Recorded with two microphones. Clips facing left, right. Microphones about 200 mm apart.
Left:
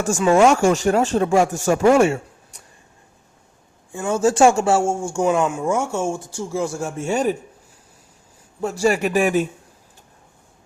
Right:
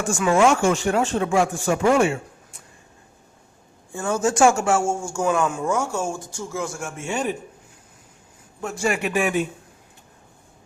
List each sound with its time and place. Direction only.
0.0 s speech: 40° left (ahead or behind)
3.9 s a man's voice: 15° left (ahead or behind)
4.2 s speech: 35° left (ahead or behind)
8.6 s speech: 35° left (ahead or behind)